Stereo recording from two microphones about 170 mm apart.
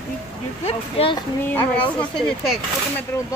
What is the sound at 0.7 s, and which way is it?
Speech, 35° left (ahead or behind).